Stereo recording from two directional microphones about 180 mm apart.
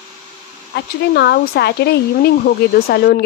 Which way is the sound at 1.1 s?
65° left (ahead or behind).